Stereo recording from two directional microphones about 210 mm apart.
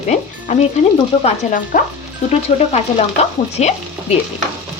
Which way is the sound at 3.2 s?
30° left (ahead or behind).